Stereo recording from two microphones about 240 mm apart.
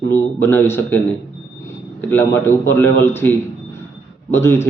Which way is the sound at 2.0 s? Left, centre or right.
Centre.